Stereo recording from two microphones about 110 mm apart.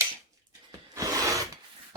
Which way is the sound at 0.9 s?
30° right (ahead or behind).